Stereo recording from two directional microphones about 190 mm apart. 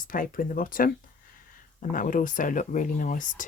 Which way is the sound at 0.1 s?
45° left (ahead or behind).